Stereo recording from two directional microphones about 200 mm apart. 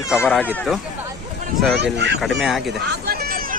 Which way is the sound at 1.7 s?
60° right (ahead or behind).